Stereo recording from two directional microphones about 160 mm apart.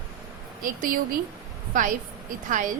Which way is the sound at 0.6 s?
60° right (ahead or behind).